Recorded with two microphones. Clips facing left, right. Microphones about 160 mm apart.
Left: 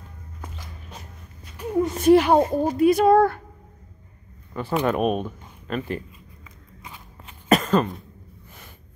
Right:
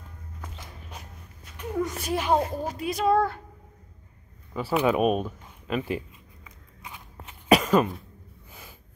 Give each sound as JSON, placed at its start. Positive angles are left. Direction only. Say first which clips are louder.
{"t": 0.8, "sound": "walk", "louder": "left 2 dB", "side_deg": -10}
{"t": 2.0, "sound": "a woman's voice", "louder": "left 11 dB", "side_deg": 65}
{"t": 4.6, "sound": "a sound", "louder": "even", "side_deg": -5}